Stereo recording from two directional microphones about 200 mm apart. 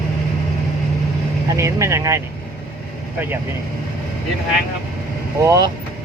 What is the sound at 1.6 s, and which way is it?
Speech, 15° right (ahead or behind).